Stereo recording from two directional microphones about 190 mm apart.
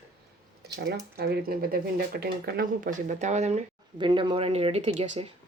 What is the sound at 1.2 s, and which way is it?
Speech, 55° right (ahead or behind).